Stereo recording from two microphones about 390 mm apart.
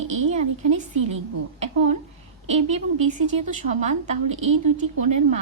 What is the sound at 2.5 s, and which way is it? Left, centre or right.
A woman's voice, centre.